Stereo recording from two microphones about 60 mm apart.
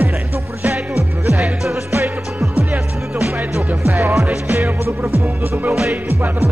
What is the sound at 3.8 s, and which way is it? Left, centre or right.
Music, right.